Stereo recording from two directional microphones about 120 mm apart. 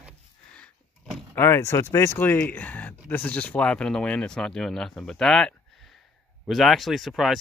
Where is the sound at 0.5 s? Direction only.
10° left (ahead or behind).